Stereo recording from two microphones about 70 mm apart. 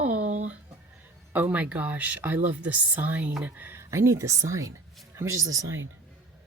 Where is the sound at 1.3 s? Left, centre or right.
Right.